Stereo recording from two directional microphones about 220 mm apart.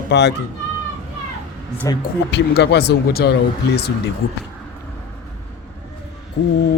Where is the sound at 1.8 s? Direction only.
15° left (ahead or behind).